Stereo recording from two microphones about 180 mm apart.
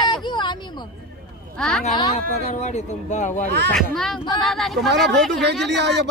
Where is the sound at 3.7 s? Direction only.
Centre (ahead or behind).